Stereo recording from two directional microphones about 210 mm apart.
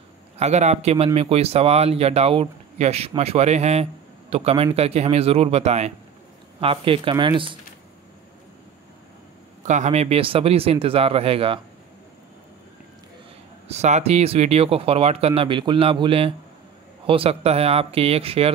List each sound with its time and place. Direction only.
0.4 s a man's voice: 35° right (ahead or behind)
9.7 s speech: 35° right (ahead or behind)
13.7 s speech: 35° right (ahead or behind)